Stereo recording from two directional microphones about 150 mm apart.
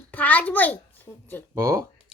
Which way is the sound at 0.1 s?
10° left (ahead or behind).